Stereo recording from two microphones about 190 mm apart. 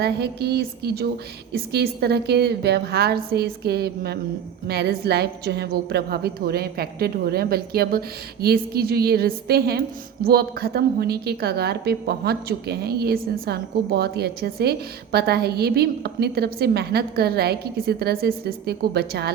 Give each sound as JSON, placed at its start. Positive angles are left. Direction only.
{"t": 0.0, "sound": "a woman's voice", "side_deg": -60}